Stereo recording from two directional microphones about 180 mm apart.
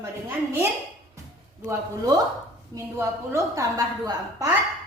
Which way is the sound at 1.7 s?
20° right (ahead or behind).